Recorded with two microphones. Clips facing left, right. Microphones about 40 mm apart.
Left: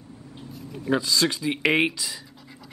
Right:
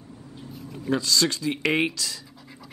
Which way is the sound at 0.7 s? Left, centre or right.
Centre.